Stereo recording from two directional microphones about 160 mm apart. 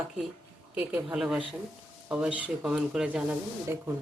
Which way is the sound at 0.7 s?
5° right (ahead or behind).